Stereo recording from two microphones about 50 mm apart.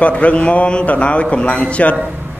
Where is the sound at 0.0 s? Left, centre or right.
Left.